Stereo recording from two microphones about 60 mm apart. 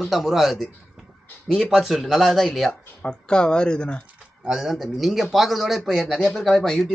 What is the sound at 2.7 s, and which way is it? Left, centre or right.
Speech, centre.